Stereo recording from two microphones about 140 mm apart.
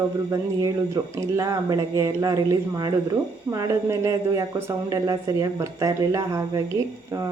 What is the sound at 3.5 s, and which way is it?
Speech, 20° right (ahead or behind).